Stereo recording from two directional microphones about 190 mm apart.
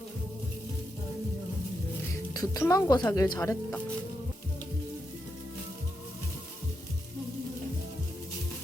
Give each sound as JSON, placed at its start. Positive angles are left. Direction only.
{"t": 2.3, "sound": "speech", "side_deg": 20}